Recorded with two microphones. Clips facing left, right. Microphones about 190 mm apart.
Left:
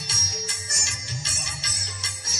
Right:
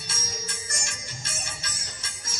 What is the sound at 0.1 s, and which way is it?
Music, 50° right (ahead or behind).